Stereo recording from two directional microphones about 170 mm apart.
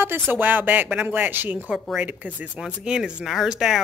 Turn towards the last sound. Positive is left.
turn(degrees=0)  # may be behind; listen again after turning